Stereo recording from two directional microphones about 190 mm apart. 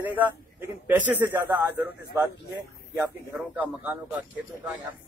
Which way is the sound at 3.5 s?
10° right (ahead or behind).